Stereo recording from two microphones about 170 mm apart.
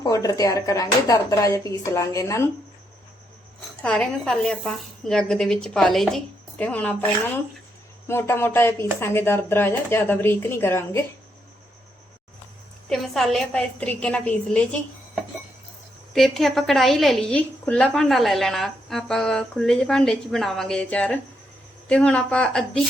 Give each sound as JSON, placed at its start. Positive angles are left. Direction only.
{"t": 0.0, "sound": "speech", "side_deg": 20}
{"t": 3.8, "sound": "a woman's voice", "side_deg": 5}
{"t": 12.9, "sound": "a woman's voice", "side_deg": 0}